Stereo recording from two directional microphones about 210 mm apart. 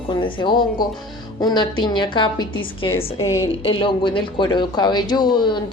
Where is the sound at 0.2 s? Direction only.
25° left (ahead or behind).